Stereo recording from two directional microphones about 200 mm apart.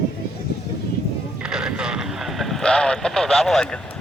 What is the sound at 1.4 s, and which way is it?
Speech, 5° right (ahead or behind).